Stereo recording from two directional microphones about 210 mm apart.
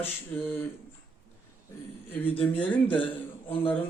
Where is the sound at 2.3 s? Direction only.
5° left (ahead or behind).